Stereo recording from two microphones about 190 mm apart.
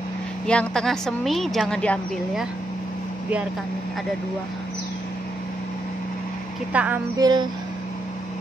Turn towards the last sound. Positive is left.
turn(degrees=-20)  # may be behind; listen again after turning